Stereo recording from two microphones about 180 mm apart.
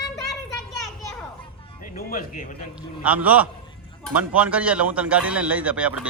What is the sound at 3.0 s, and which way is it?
A man's voice, 10° right (ahead or behind).